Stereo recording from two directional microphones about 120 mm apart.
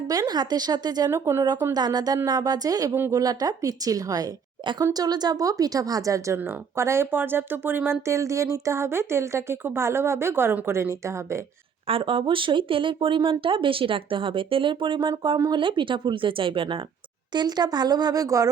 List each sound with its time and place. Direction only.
0.1 s a woman's voice: 30° right (ahead or behind)
1.7 s a woman's voice: 35° right (ahead or behind)
2.9 s speech: 20° right (ahead or behind)
3.2 s speech: 30° right (ahead or behind)
11.9 s speech: 50° right (ahead or behind)
17.3 s a woman's voice: 35° right (ahead or behind)